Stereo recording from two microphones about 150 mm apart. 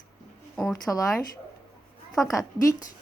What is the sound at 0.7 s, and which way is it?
Speech, 25° left (ahead or behind).